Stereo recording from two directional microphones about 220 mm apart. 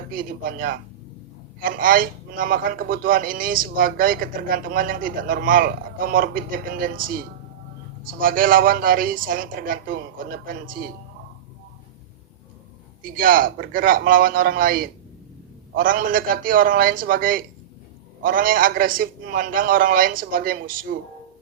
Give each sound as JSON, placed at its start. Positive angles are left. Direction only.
{"t": 0.1, "sound": "a man's voice", "side_deg": -40}
{"t": 13.0, "sound": "a man's voice", "side_deg": -40}